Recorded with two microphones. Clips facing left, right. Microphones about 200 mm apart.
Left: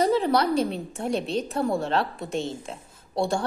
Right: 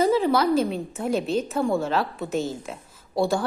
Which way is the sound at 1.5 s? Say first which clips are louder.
Right 1 dB; 30° left (ahead or behind).